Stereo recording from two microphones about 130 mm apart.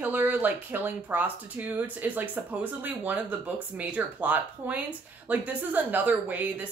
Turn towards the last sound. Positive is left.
turn(degrees=-10)  # may be behind; listen again after turning